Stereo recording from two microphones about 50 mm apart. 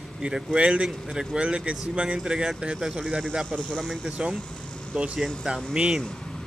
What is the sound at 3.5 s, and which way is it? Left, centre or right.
Speech, left.